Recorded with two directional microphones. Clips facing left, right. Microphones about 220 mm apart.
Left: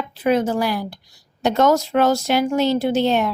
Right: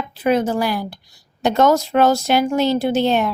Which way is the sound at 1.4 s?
30° right (ahead or behind).